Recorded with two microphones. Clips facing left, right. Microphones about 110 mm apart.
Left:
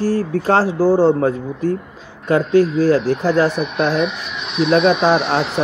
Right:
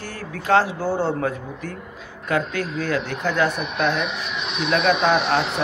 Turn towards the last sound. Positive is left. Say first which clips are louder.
# left 3 dB
turn(degrees=0)  # may be behind; listen again after turning